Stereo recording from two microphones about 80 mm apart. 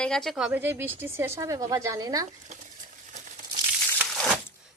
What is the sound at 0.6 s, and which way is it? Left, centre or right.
Speech, right.